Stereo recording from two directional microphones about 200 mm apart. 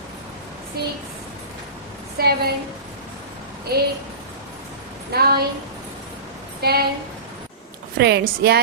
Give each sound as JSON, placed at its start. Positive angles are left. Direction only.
{"t": 0.8, "sound": "a woman's voice", "side_deg": -50}
{"t": 2.1, "sound": "a woman's voice", "side_deg": -50}
{"t": 3.7, "sound": "a woman's voice", "side_deg": -50}
{"t": 5.1, "sound": "a woman's voice", "side_deg": -50}
{"t": 6.6, "sound": "a woman's voice", "side_deg": -50}
{"t": 7.9, "sound": "a woman's voice", "side_deg": -55}